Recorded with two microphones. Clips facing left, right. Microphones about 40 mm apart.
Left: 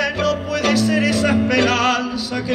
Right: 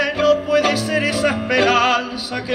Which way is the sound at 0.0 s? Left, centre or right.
Centre.